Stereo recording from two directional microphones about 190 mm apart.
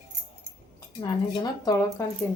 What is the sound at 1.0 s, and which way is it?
Speech, 20° left (ahead or behind).